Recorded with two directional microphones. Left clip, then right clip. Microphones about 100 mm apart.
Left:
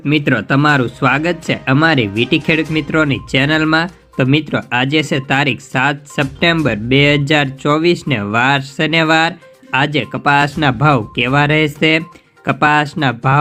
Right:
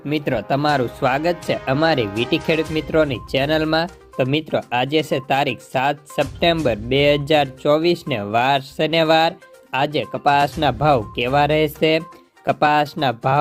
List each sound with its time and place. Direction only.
0.1 s speech: 20° right (ahead or behind)